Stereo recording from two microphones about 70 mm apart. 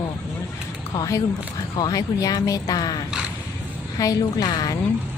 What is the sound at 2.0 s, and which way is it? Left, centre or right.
Speech, left.